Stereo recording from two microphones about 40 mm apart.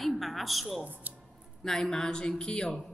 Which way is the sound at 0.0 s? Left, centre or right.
Centre.